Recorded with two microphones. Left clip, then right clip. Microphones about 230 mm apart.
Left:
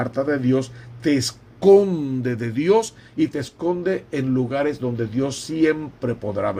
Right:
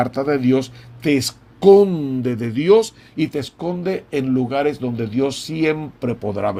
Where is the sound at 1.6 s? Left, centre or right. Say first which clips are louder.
Right 3 dB; right.